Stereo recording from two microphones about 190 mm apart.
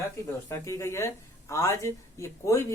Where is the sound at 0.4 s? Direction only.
15° left (ahead or behind).